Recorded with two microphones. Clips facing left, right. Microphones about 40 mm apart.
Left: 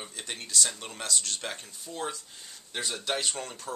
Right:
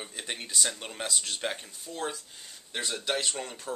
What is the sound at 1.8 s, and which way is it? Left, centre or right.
Speech, centre.